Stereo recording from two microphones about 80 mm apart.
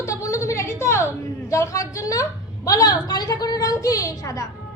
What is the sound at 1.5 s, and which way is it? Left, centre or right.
A woman's voice, left.